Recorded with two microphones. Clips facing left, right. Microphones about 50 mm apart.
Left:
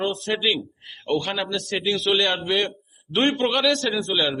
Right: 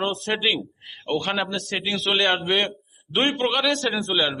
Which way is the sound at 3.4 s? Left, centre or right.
Centre.